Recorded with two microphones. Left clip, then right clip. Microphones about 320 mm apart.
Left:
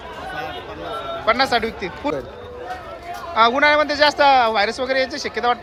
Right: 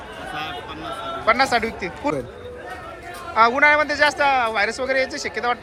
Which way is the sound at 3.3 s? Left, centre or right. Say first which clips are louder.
Even; centre.